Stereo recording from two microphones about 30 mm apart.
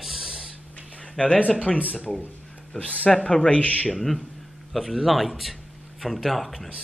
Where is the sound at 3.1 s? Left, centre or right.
Left.